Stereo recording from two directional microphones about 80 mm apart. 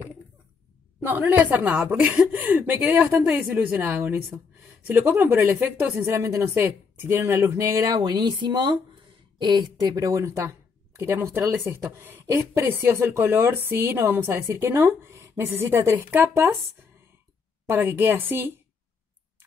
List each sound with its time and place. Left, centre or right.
1.2 s a woman's voice: right
5.9 s a woman's voice: right
8.0 s a sound: right
9.4 s a woman's voice: right
17.6 s a woman's voice: right